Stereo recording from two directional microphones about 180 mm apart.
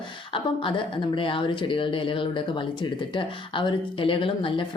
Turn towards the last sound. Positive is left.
turn(degrees=30)  # may be behind; listen again after turning